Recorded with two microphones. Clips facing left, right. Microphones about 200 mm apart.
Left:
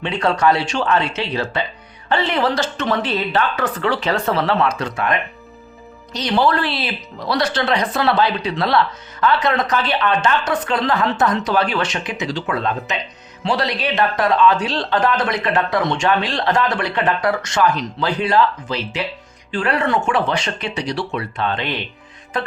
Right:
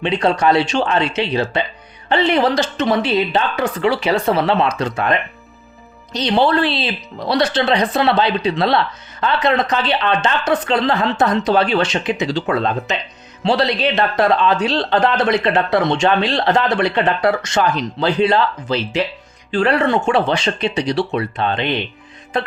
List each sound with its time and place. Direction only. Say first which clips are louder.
0.0 s speech: right 2 dB; 20° right (ahead or behind)
6.1 s speech: right 2 dB; 25° right (ahead or behind)